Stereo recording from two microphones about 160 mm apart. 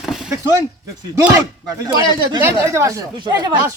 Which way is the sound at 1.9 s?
25° right (ahead or behind).